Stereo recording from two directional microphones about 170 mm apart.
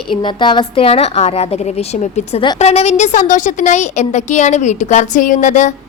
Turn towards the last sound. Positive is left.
turn(degrees=45)  # may be behind; listen again after turning